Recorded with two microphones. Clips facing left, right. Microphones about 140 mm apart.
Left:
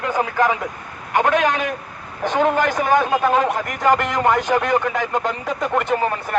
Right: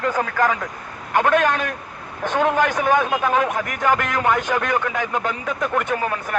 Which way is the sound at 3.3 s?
5° left (ahead or behind).